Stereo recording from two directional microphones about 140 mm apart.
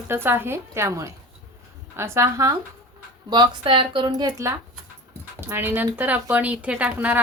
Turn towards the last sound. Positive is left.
turn(degrees=-10)  # may be behind; listen again after turning